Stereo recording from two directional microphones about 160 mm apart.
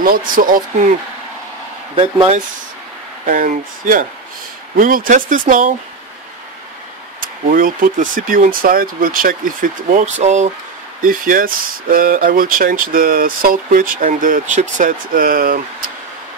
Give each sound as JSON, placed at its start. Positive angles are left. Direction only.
{"t": 0.0, "sound": "speech", "side_deg": -60}
{"t": 3.3, "sound": "speech", "side_deg": -55}
{"t": 7.2, "sound": "speech", "side_deg": -60}
{"t": 11.0, "sound": "speech", "side_deg": -60}